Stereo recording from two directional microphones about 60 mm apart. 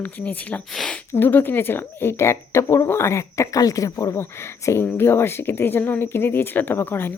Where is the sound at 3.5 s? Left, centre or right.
Left.